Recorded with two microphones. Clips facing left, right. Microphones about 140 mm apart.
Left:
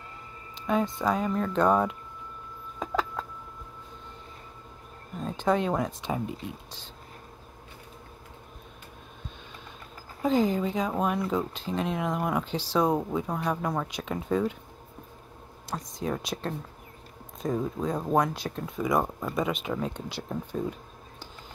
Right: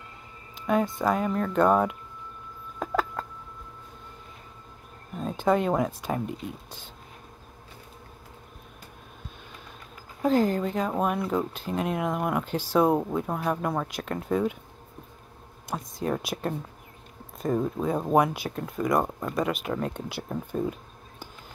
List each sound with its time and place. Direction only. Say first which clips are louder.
1.0 s speech: right 1 dB; centre (ahead or behind)
2.8 s a sound: right 2 dB; centre (ahead or behind)
5.2 s speech: right 2 dB; 5° right (ahead or behind)
10.2 s speech: right 1 dB; centre (ahead or behind)
16.0 s speech: right 3 dB; 5° right (ahead or behind)